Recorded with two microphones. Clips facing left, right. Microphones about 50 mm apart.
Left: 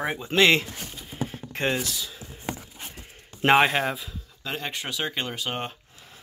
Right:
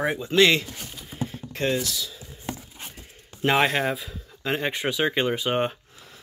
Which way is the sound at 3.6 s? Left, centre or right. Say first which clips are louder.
Even; centre.